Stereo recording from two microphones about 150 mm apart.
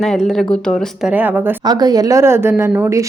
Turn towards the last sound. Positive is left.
turn(degrees=-20)  # may be behind; listen again after turning